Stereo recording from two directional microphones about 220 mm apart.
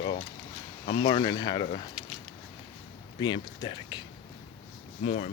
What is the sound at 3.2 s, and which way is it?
Speech, 20° left (ahead or behind).